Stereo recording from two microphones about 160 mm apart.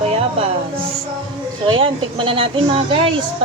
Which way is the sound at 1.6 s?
30° right (ahead or behind).